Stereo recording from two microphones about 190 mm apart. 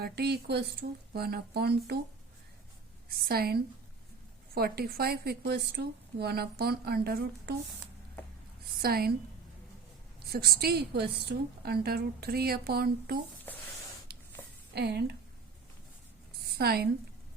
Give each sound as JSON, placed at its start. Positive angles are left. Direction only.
{"t": 0.0, "sound": "a woman's voice", "side_deg": -60}
{"t": 3.2, "sound": "a woman's voice", "side_deg": -55}
{"t": 8.8, "sound": "a woman's voice", "side_deg": -55}
{"t": 10.2, "sound": "a woman's voice", "side_deg": -55}
{"t": 13.5, "sound": "a sound", "side_deg": 10}
{"t": 14.8, "sound": "a woman's voice", "side_deg": -55}
{"t": 16.6, "sound": "a woman's voice", "side_deg": -55}